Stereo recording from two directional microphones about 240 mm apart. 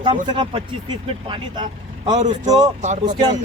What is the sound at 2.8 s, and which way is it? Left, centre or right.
Speech, right.